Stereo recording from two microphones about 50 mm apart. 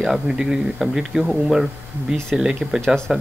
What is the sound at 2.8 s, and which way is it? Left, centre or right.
Speech, centre.